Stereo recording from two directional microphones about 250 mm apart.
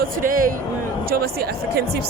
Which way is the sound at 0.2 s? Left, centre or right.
Right.